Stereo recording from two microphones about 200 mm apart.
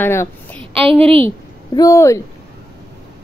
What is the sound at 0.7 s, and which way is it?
Speech, 30° right (ahead or behind).